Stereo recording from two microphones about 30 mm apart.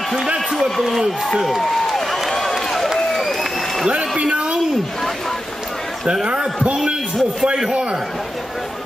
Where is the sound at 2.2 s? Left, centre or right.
Centre.